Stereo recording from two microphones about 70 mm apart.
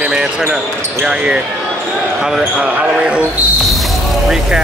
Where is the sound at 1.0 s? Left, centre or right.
Centre.